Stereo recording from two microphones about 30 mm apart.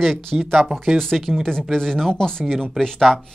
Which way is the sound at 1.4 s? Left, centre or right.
Centre.